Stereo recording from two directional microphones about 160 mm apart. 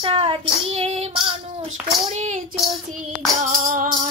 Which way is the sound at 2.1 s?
45° right (ahead or behind).